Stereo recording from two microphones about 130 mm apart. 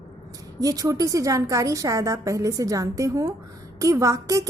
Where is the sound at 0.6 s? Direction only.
25° right (ahead or behind).